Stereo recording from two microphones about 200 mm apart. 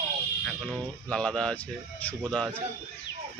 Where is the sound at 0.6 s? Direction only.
5° left (ahead or behind).